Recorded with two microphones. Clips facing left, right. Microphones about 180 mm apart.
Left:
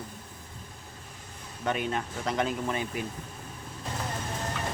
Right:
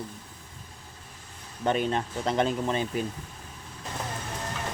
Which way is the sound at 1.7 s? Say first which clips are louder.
Right 4 dB; 30° right (ahead or behind).